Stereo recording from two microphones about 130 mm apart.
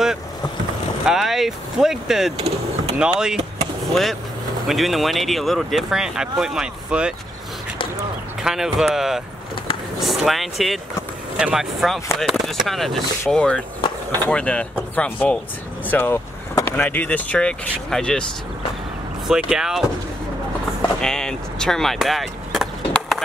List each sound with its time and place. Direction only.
1.0 s speech: 5° right (ahead or behind)
2.3 s speech: 50° right (ahead or behind)
3.0 s speech: 5° right (ahead or behind)
8.4 s speech: 5° right (ahead or behind)
19.2 s speech: 5° right (ahead or behind)
21.0 s speech: 5° left (ahead or behind)